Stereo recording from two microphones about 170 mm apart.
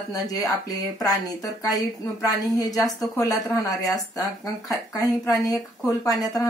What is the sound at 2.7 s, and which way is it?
Speech, centre (ahead or behind).